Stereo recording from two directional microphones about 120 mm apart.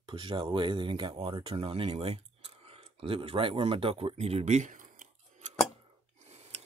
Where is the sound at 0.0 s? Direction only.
45° right (ahead or behind); by 5.5 s 90° right.